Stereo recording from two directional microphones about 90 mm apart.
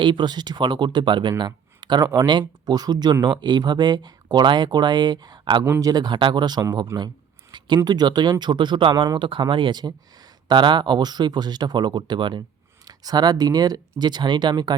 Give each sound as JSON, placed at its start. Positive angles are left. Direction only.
{"t": 0.0, "sound": "speech", "side_deg": -60}
{"t": 7.5, "sound": "a sound", "side_deg": -60}
{"t": 7.9, "sound": "speech", "side_deg": -50}
{"t": 12.8, "sound": "speech", "side_deg": -45}